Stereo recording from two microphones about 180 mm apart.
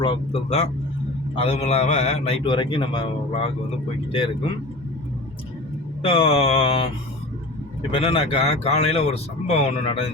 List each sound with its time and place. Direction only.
0.0 s a man's voice: 30° left (ahead or behind)
6.1 s a man's voice: 35° left (ahead or behind)